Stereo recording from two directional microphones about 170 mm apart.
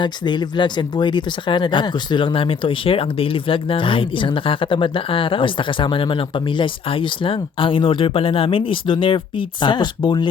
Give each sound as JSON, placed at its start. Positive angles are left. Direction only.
{"t": 0.0, "sound": "speech", "side_deg": 25}